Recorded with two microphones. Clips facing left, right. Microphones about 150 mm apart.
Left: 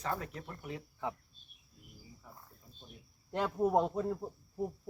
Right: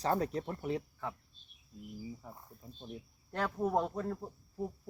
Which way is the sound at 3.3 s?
15° left (ahead or behind).